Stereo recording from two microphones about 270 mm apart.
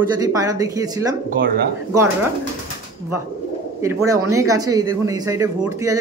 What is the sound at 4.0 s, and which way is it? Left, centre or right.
Speech, right.